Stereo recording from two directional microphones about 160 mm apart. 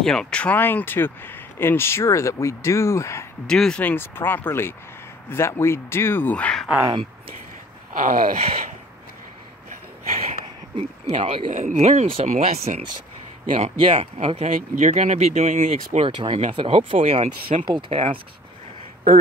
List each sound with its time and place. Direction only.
0.0 s speech: 5° left (ahead or behind)
3.4 s speech: 5° left (ahead or behind)
6.9 s speech: 30° right (ahead or behind)
7.9 s speech: 60° right (ahead or behind)
10.3 s a sound: 45° right (ahead or behind)
11.5 s speech: 50° right (ahead or behind)
14.1 s speech: 40° right (ahead or behind)